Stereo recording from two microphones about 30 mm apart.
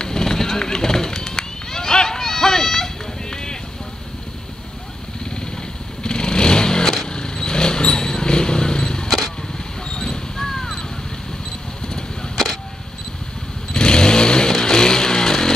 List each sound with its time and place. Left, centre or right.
0.0 s run: left
3.3 s clip-clop: left
6.0 s vehicle: left
9.8 s a sound: left
10.3 s a sound: centre
13.7 s chainsaw: left